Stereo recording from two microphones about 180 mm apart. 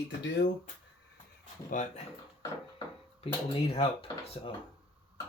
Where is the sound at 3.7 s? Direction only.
30° left (ahead or behind).